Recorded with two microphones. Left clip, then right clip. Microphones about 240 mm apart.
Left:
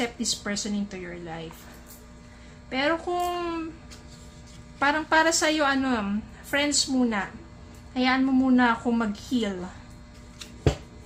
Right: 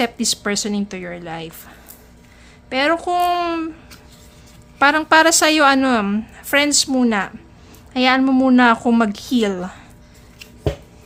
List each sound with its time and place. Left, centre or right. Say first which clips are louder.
0.0 s a woman's voice: right 9 dB; right
2.6 s a woman's voice: right 8 dB; right
4.8 s a woman's voice: right 9 dB; right